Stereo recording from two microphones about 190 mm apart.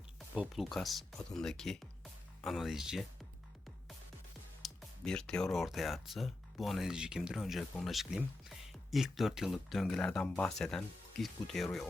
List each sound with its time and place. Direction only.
0.3 s speech: centre (ahead or behind)
4.6 s speech: centre (ahead or behind)